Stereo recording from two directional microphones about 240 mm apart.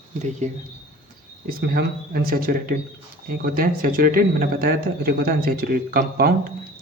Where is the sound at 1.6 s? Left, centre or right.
Right.